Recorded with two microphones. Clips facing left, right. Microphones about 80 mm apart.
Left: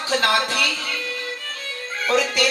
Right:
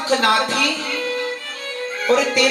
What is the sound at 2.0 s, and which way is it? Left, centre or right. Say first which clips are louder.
Music: right 4 dB; right.